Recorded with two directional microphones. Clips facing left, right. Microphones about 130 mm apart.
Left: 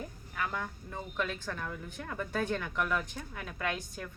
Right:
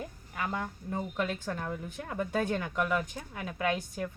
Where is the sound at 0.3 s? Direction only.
25° right (ahead or behind).